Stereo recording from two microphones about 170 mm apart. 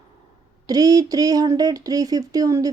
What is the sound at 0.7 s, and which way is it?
A woman's voice, 20° right (ahead or behind).